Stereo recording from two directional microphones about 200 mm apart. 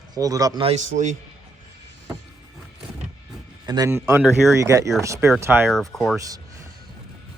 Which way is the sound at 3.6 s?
20° right (ahead or behind).